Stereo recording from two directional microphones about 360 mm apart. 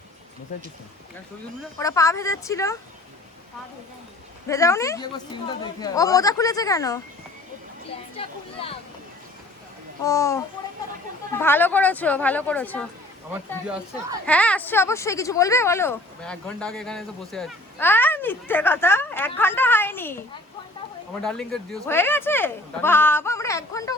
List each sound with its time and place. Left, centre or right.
1.8 s speech: centre
4.4 s speech: centre
8.1 s speech: centre
10.0 s speech: centre
21.2 s speech: centre